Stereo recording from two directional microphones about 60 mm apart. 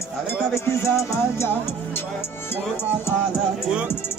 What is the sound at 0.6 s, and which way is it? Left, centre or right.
Music, left.